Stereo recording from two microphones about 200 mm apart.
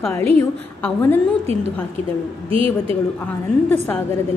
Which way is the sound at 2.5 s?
25° right (ahead or behind).